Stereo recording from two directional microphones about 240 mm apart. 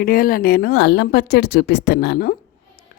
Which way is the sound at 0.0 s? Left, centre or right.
Left.